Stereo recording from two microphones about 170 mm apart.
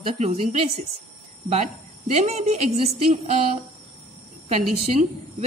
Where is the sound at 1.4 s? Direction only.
40° right (ahead or behind).